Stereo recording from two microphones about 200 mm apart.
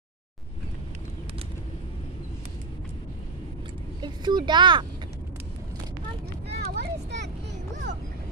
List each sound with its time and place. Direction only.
4.0 s speech: 20° right (ahead or behind)
6.5 s vehicle: 55° right (ahead or behind)